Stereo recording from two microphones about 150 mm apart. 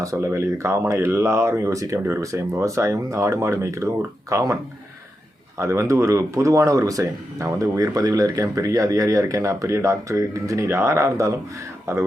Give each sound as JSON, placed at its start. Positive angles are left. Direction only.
{"t": 0.0, "sound": "speech", "side_deg": -20}
{"t": 5.5, "sound": "speech", "side_deg": -20}